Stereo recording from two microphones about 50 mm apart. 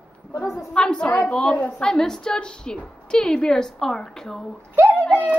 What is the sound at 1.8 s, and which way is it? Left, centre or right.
A woman's voice, centre.